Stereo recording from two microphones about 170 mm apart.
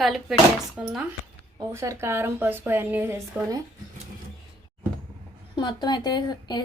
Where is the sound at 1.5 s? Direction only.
15° right (ahead or behind).